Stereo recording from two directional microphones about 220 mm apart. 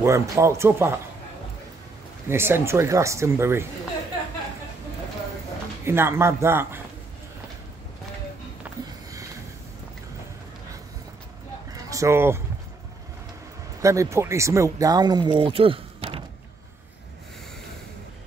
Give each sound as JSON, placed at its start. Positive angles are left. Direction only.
{"t": 0.0, "sound": "speech", "side_deg": -15}
{"t": 2.2, "sound": "speech", "side_deg": -10}
{"t": 5.9, "sound": "speech", "side_deg": -10}
{"t": 8.6, "sound": "a sound", "side_deg": -5}
{"t": 11.9, "sound": "speech", "side_deg": -15}
{"t": 13.7, "sound": "speech", "side_deg": -15}